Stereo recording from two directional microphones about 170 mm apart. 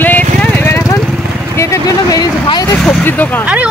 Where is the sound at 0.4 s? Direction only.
10° left (ahead or behind).